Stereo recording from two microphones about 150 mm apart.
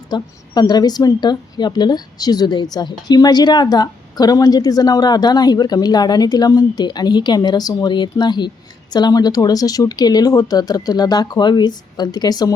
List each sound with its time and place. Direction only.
0.1 s a woman's voice: 25° left (ahead or behind)